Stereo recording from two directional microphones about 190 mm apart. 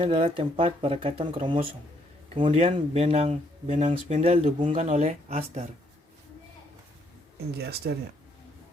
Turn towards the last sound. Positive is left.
turn(degrees=-60)  # may be behind; listen again after turning